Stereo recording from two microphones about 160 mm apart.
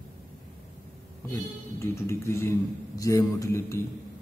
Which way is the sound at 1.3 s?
15° left (ahead or behind).